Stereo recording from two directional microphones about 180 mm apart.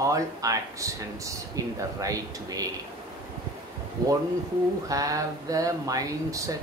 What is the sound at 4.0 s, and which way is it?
Speech, 20° right (ahead or behind).